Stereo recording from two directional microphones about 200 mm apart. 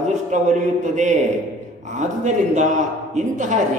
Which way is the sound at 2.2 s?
35° right (ahead or behind).